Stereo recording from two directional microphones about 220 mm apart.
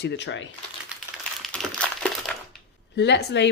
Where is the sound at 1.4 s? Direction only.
5° left (ahead or behind).